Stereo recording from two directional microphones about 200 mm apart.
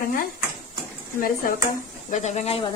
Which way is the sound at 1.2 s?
45° left (ahead or behind).